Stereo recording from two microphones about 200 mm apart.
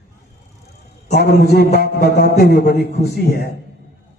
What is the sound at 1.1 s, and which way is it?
Music, 50° left (ahead or behind).